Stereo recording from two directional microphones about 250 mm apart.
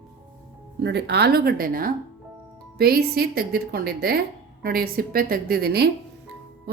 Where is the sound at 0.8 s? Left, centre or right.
Right.